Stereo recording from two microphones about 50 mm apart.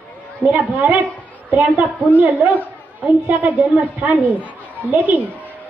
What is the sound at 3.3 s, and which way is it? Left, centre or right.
A woman's voice, right.